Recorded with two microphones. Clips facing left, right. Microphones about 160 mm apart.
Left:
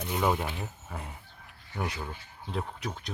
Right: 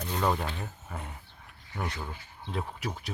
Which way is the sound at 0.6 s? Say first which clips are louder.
Even; centre (ahead or behind).